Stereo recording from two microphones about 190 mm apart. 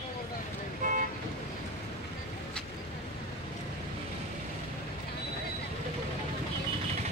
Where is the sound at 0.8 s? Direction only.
45° right (ahead or behind).